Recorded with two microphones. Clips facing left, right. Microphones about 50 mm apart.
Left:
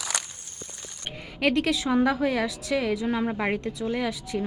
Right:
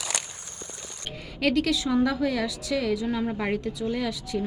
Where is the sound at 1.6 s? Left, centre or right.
Centre.